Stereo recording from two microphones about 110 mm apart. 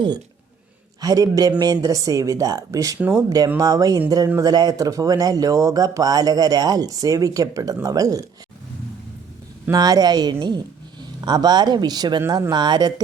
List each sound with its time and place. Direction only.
1.0 s speech: 35° right (ahead or behind)
9.7 s speech: 35° right (ahead or behind)